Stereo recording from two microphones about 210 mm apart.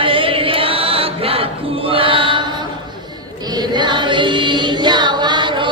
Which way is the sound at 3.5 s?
20° right (ahead or behind).